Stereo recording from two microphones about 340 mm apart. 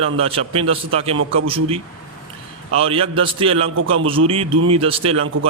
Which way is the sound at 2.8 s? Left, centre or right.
Centre.